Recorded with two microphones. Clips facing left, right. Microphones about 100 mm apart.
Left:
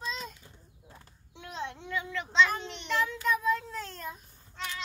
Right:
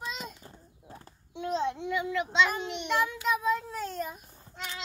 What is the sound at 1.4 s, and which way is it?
Child singing, 90° right.